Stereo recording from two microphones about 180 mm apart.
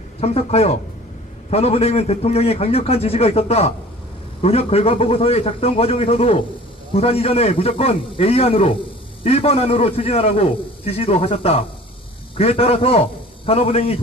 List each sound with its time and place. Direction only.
0.2 s a man's voice: 35° left (ahead or behind)